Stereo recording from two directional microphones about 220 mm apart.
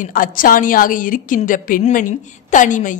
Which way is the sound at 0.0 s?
40° left (ahead or behind).